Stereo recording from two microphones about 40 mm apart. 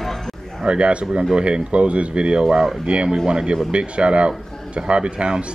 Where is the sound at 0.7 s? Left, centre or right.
Right.